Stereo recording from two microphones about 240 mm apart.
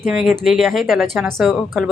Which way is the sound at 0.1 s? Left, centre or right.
Centre.